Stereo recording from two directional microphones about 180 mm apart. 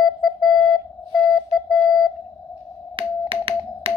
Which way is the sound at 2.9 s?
30° right (ahead or behind).